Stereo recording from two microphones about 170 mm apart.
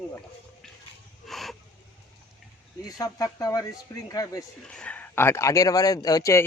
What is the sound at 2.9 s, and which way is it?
Speech, 20° left (ahead or behind).